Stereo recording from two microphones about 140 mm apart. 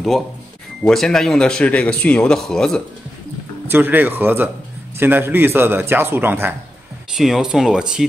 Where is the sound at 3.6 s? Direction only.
15° right (ahead or behind).